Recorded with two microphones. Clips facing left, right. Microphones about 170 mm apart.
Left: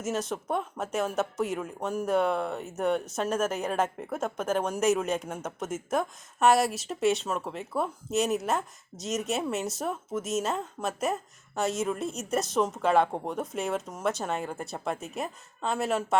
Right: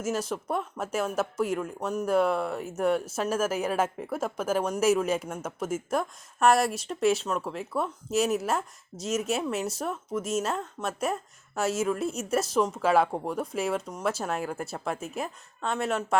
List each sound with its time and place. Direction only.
0.0 s speech: centre (ahead or behind)